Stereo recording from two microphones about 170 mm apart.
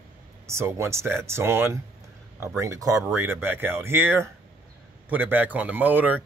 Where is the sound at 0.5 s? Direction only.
15° right (ahead or behind).